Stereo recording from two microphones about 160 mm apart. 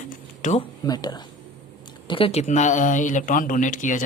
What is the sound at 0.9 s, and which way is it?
Speech, 25° left (ahead or behind).